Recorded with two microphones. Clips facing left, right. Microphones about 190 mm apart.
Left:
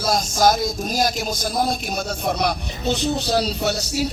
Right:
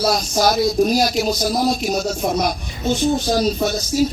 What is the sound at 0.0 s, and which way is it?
A man's voice, 50° left (ahead or behind).